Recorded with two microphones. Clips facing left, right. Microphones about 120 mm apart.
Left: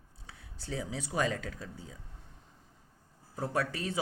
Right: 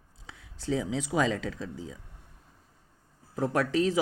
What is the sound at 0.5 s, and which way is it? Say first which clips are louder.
Speech: right 8 dB; 90° right.